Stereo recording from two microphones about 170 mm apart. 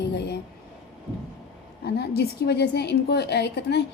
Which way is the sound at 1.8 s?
75° left (ahead or behind).